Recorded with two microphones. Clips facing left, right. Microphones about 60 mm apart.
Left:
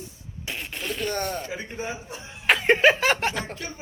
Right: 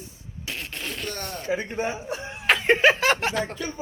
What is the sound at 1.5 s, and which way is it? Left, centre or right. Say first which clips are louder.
Speech: right 6 dB; right.